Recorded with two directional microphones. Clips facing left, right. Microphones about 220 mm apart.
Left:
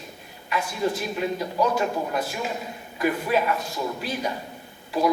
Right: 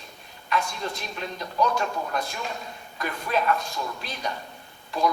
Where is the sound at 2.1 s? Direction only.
5° left (ahead or behind).